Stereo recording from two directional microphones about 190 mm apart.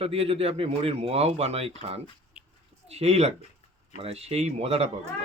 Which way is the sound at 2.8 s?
35° right (ahead or behind).